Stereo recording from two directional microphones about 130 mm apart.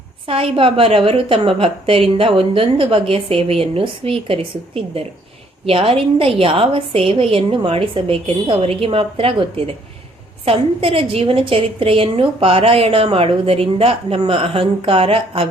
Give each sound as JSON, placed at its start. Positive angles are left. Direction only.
{"t": 0.3, "sound": "a woman's voice", "side_deg": -45}